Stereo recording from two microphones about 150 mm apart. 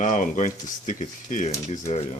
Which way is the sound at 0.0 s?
55° left (ahead or behind).